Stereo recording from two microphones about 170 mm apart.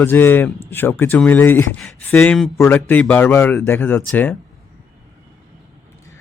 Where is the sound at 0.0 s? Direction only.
10° left (ahead or behind).